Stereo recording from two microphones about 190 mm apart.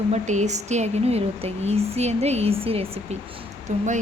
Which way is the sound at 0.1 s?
40° right (ahead or behind).